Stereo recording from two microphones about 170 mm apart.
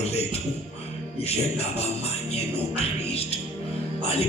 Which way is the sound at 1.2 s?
35° left (ahead or behind).